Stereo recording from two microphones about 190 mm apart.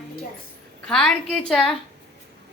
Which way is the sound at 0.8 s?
5° left (ahead or behind).